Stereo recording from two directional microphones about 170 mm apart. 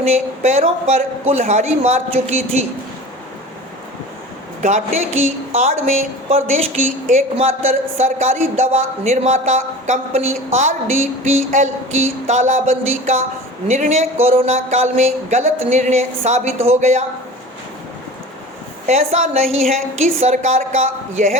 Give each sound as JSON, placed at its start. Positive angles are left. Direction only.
{"t": 0.4, "sound": "a woman's voice", "side_deg": -40}
{"t": 4.6, "sound": "a woman's voice", "side_deg": -45}
{"t": 18.9, "sound": "a woman's voice", "side_deg": -40}